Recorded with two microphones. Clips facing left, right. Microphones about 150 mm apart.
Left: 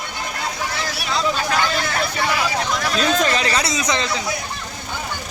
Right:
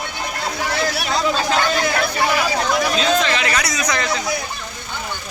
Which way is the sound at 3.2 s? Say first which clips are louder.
Left 1 dB; 40° left (ahead or behind).